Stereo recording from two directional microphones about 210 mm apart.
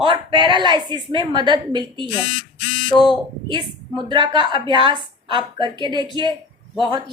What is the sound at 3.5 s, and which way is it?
A woman's voice, 20° right (ahead or behind).